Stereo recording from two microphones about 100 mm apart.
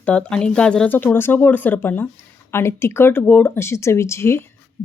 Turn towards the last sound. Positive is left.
turn(degrees=25)  # may be behind; listen again after turning